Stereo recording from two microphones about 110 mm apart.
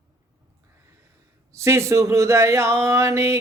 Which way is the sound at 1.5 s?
25° right (ahead or behind).